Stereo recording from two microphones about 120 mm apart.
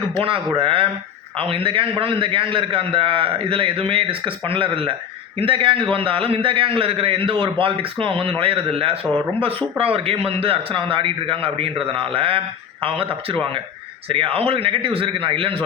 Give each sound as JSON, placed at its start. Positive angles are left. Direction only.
{"t": 0.2, "sound": "a man's voice", "side_deg": -50}